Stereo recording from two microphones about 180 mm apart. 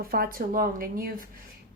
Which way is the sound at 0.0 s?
55° right (ahead or behind).